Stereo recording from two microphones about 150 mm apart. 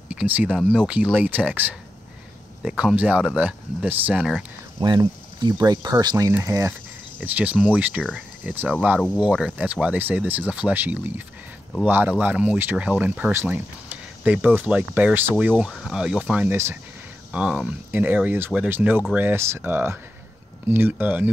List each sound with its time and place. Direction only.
0.1 s speech: 10° right (ahead or behind)
4.7 s speech: 30° right (ahead or behind); by 21.3 s 10° right (ahead or behind)